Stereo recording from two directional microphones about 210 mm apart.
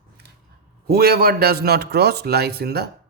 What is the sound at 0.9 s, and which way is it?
A man's voice, 50° right (ahead or behind).